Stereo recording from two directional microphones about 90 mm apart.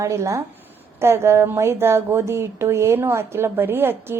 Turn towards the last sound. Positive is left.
turn(degrees=-25)  # may be behind; listen again after turning